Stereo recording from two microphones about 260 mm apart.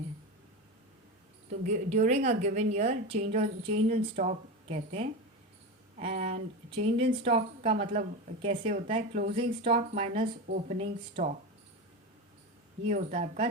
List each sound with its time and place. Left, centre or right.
1.6 s speech: right
12.9 s speech: right